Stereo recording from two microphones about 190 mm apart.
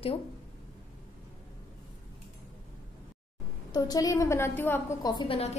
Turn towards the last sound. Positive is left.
turn(degrees=30)  # may be behind; listen again after turning